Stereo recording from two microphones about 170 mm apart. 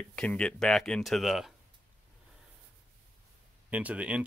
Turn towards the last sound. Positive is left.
turn(degrees=-5)  # may be behind; listen again after turning